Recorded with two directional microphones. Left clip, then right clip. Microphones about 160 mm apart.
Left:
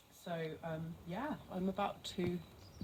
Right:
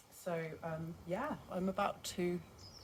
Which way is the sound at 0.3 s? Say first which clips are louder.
Right 2 dB; 30° right (ahead or behind).